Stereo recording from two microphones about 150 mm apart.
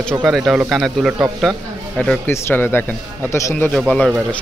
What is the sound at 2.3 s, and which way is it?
Speech, 15° left (ahead or behind).